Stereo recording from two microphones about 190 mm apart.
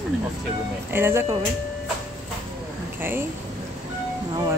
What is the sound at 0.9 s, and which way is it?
Speech, 15° right (ahead or behind).